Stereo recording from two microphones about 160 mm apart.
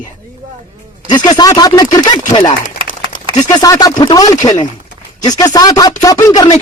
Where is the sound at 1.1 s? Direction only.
25° left (ahead or behind).